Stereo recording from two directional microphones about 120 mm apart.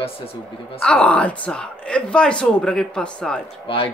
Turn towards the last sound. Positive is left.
turn(degrees=50)  # may be behind; listen again after turning